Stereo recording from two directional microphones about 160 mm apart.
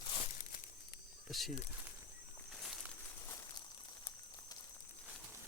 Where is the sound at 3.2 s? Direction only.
20° left (ahead or behind).